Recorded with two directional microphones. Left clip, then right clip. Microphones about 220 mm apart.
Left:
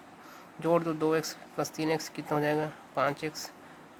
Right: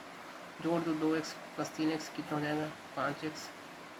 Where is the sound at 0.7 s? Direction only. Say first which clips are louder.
Left 6 dB; 35° left (ahead or behind).